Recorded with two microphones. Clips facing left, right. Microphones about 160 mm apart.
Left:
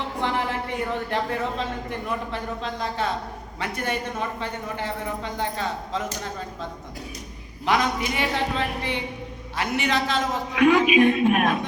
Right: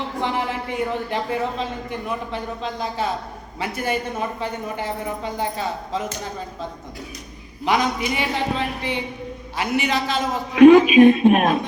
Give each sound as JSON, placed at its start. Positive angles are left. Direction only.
{"t": 0.2, "sound": "a man's voice", "side_deg": 0}
{"t": 7.6, "sound": "speech", "side_deg": 0}
{"t": 10.5, "sound": "speech", "side_deg": -25}